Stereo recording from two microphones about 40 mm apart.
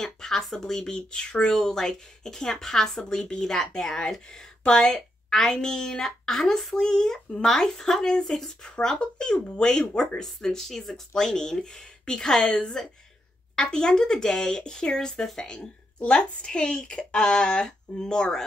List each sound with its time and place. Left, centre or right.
0.0 s a woman's voice: centre
9.0 s a woman's voice: left